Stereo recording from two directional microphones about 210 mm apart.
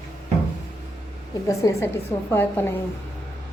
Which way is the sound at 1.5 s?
15° left (ahead or behind).